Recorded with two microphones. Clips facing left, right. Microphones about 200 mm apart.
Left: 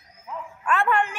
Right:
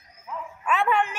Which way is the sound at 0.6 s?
5° right (ahead or behind).